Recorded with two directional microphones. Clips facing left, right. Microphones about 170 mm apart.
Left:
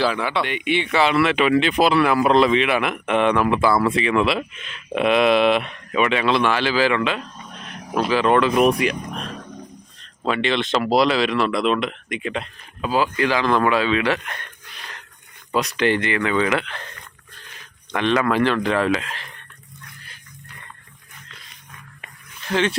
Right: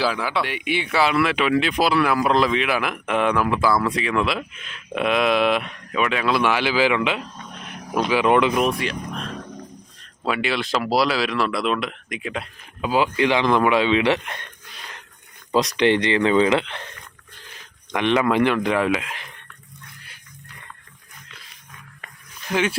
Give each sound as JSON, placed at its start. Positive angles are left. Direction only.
{"t": 0.0, "sound": "speech", "side_deg": -5}
{"t": 8.5, "sound": "speech", "side_deg": 10}
{"t": 10.2, "sound": "speech", "side_deg": -5}
{"t": 12.8, "sound": "speech", "side_deg": -15}
{"t": 15.5, "sound": "speech", "side_deg": -20}
{"t": 17.9, "sound": "speech", "side_deg": -15}
{"t": 22.4, "sound": "speech", "side_deg": -10}